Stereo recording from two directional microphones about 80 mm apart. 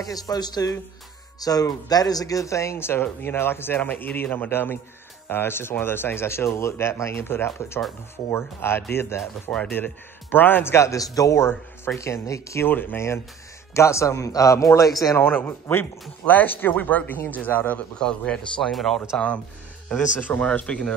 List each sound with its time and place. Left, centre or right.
0.0 s a man's voice: left
12.6 s a man's voice: left
15.1 s speech: left
18.6 s speech: centre
19.1 s speech: centre